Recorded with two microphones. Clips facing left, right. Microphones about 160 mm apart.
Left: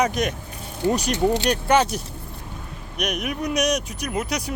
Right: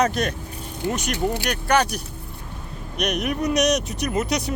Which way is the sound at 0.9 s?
35° left (ahead or behind).